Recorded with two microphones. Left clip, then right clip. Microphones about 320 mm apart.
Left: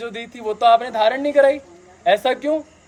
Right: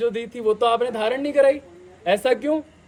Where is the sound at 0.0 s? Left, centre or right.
Centre.